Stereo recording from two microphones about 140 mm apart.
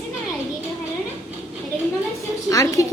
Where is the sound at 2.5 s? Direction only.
25° left (ahead or behind).